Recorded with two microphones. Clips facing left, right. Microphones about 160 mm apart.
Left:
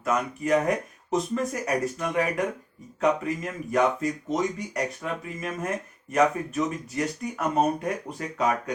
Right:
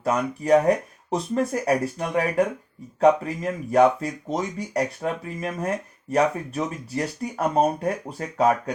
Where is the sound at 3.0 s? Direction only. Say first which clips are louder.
Right 6 dB; 35° right (ahead or behind).